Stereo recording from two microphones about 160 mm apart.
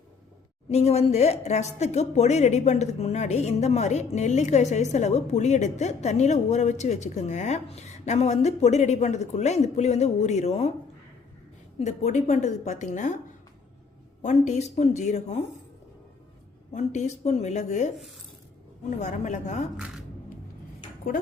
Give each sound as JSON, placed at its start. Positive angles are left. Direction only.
{"t": 0.7, "sound": "a woman's voice", "side_deg": 40}
{"t": 11.8, "sound": "a woman's voice", "side_deg": 45}
{"t": 14.2, "sound": "a woman's voice", "side_deg": 50}
{"t": 16.7, "sound": "a woman's voice", "side_deg": 45}
{"t": 19.7, "sound": "speech", "side_deg": -5}